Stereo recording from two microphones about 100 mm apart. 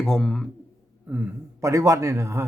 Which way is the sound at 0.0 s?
5° left (ahead or behind).